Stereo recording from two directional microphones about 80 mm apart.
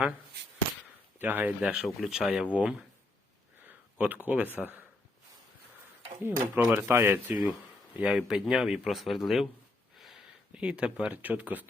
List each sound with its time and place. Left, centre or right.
1.2 s speech: right
1.6 s speech: centre
2.5 s speech: centre
6.2 s speech: right
6.7 s speech: right
8.1 s speech: centre
10.5 s speech: centre